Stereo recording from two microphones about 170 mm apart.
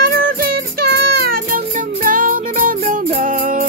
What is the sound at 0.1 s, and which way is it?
Music, 60° right (ahead or behind).